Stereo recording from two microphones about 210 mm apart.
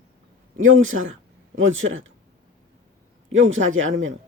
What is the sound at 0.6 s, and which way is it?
A man's voice, 70° right (ahead or behind).